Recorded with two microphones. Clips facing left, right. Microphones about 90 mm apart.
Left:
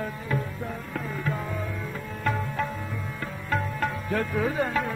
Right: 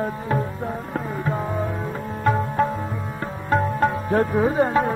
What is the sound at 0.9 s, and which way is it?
Tabla, 35° right (ahead or behind).